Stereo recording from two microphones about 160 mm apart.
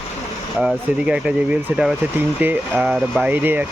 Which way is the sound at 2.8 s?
Centre (ahead or behind).